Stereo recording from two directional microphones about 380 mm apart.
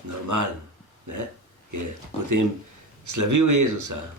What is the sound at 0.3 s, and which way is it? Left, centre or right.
Speech, right.